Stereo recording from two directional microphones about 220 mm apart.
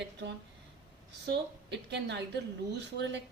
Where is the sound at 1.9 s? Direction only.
50° right (ahead or behind).